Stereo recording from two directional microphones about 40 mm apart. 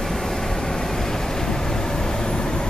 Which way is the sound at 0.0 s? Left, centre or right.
Centre.